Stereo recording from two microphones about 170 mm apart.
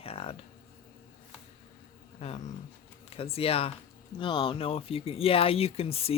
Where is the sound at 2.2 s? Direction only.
35° left (ahead or behind).